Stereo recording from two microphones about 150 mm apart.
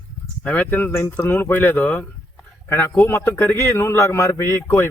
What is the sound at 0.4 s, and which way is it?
Speech, 10° left (ahead or behind).